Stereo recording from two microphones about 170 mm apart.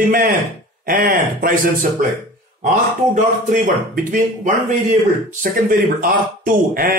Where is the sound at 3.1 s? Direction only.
50° right (ahead or behind).